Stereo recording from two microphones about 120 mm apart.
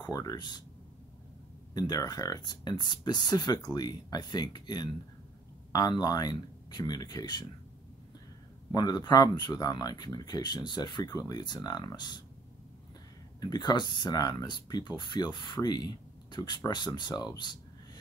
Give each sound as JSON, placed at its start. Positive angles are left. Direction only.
{"t": 0.0, "sound": "speech", "side_deg": 30}
{"t": 1.7, "sound": "speech", "side_deg": 35}
{"t": 8.7, "sound": "speech", "side_deg": 35}
{"t": 13.4, "sound": "speech", "side_deg": 35}